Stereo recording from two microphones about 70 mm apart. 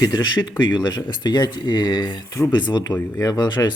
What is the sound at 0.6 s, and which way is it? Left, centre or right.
Speech, left.